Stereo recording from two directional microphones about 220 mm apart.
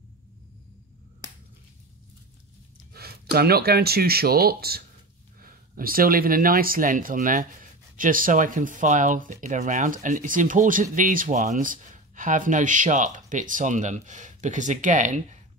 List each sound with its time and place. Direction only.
1.2 s finger snapping: 15° right (ahead or behind)
2.9 s speech: 45° right (ahead or behind)